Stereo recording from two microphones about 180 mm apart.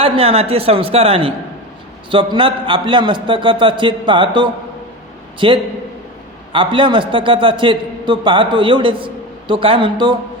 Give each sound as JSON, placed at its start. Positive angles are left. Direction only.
{"t": 0.0, "sound": "a man's voice", "side_deg": -35}